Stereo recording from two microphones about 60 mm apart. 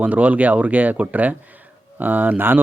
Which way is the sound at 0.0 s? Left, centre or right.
Right.